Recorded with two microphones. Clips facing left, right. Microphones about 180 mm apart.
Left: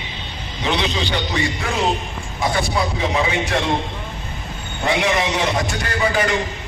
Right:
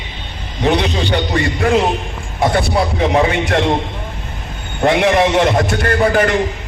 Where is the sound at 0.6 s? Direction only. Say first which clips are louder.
Right 6 dB; 50° right (ahead or behind).